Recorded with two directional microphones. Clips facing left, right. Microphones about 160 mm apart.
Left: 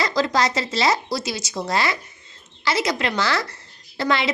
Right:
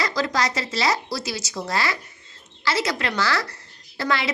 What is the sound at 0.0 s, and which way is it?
A woman's voice, 25° left (ahead or behind).